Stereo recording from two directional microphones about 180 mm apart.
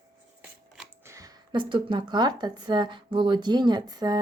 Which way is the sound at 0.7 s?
15° right (ahead or behind).